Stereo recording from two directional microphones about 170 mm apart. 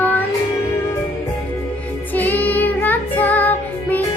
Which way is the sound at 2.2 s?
10° left (ahead or behind).